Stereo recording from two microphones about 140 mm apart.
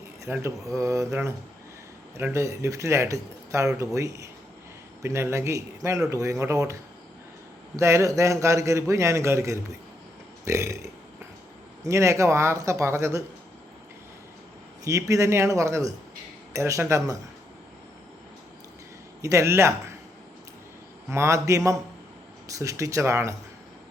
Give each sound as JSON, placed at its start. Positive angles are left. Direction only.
{"t": 0.3, "sound": "a man's voice", "side_deg": -20}
{"t": 7.8, "sound": "a man's voice", "side_deg": -20}
{"t": 11.9, "sound": "a man's voice", "side_deg": -20}
{"t": 14.8, "sound": "a man's voice", "side_deg": -25}
{"t": 19.2, "sound": "a man's voice", "side_deg": -20}
{"t": 21.1, "sound": "a man's voice", "side_deg": -20}